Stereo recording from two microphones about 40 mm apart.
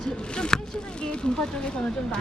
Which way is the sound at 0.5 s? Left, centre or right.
Centre.